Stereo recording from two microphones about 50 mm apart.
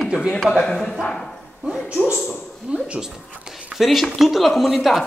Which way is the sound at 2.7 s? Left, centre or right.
Centre.